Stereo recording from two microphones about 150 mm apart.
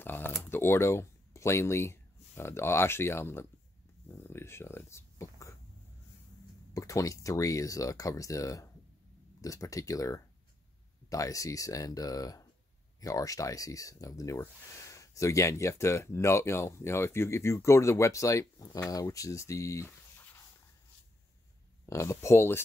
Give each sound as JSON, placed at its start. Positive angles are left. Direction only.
{"t": 0.0, "sound": "speech", "side_deg": 15}
{"t": 4.1, "sound": "a sound", "side_deg": 15}
{"t": 6.7, "sound": "speech", "side_deg": 20}
{"t": 21.8, "sound": "speech", "side_deg": 20}